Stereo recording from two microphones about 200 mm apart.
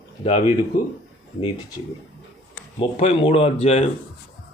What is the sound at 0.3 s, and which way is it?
Speech, 30° left (ahead or behind).